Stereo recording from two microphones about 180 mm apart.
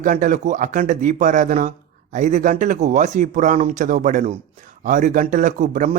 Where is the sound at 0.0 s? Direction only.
45° right (ahead or behind).